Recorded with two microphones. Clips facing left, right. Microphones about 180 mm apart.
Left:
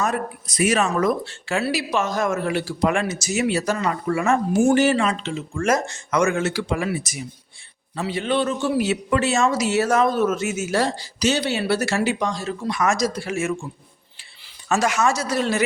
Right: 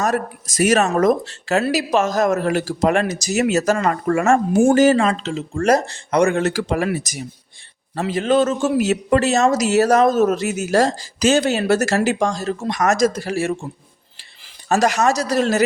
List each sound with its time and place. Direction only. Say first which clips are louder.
0.0 s speech: right 3 dB; 45° right (ahead or behind)
14.7 s speech: right 3 dB; 35° right (ahead or behind)